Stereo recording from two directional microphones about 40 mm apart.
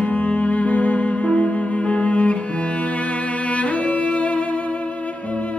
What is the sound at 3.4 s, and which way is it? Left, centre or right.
Music, left.